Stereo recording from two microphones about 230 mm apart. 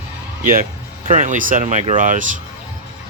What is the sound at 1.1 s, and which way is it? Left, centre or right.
Speech, right.